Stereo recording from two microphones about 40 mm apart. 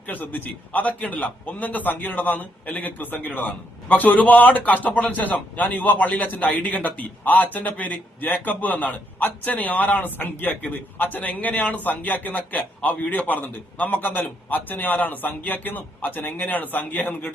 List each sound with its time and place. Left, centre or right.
0.1 s a man's voice: left